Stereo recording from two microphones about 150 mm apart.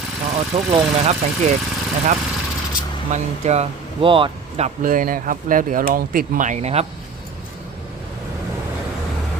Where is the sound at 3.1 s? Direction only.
45° right (ahead or behind).